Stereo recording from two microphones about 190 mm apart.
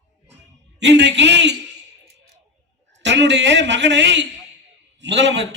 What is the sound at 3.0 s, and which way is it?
A man's voice, 65° right (ahead or behind).